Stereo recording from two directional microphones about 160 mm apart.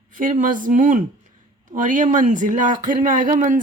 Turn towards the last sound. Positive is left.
turn(degrees=-55)  # may be behind; listen again after turning